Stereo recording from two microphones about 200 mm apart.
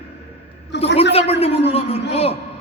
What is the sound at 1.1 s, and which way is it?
A man's voice, 30° left (ahead or behind).